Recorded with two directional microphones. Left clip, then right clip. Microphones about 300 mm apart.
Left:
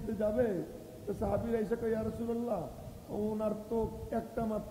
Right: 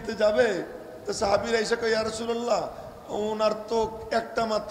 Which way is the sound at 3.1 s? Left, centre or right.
Right.